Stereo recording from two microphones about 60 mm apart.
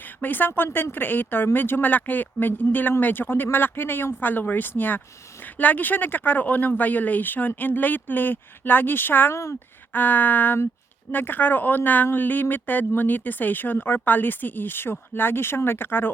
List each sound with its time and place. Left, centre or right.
0.2 s speech: left
9.3 s speech: left
9.9 s speech: left